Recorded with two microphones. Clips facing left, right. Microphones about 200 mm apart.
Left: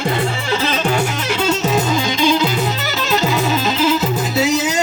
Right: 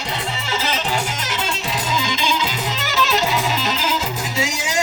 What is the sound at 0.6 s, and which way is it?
Music, 60° left (ahead or behind).